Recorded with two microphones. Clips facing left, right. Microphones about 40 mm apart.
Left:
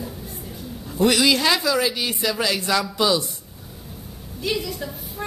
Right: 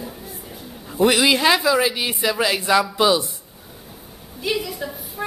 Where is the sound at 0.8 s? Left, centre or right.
Centre.